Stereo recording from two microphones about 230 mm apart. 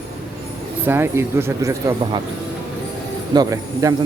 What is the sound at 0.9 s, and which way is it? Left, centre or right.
Speech, centre.